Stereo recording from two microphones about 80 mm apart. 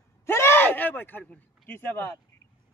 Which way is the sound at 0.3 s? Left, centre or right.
Left.